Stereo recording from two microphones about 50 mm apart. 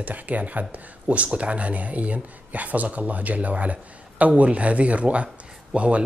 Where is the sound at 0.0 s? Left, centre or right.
Right.